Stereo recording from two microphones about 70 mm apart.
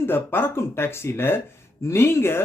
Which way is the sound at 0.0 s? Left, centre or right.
Left.